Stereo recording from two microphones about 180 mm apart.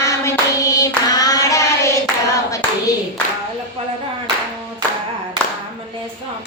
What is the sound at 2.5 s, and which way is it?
Clapping, 20° left (ahead or behind).